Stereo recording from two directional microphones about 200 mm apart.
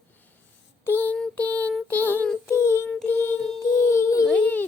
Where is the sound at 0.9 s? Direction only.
10° left (ahead or behind).